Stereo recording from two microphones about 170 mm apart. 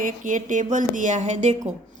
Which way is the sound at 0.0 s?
50° right (ahead or behind).